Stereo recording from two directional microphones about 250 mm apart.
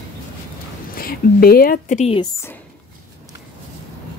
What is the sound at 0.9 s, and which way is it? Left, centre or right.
A woman's voice, left.